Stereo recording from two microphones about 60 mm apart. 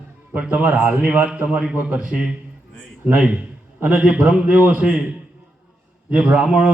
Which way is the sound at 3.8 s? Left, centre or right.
Right.